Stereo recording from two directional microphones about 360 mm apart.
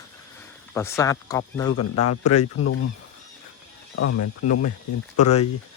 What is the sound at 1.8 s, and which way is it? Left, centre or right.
Speech, left.